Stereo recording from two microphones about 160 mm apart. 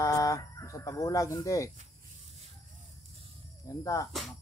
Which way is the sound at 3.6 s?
20° left (ahead or behind).